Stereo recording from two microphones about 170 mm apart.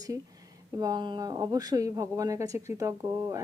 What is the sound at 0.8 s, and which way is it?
Speech, 25° right (ahead or behind).